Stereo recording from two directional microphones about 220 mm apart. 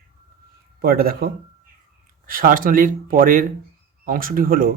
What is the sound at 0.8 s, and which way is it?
Speech, 45° right (ahead or behind).